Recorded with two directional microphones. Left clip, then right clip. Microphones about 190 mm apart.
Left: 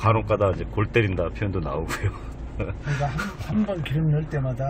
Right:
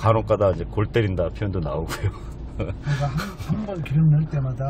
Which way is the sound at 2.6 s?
20° right (ahead or behind).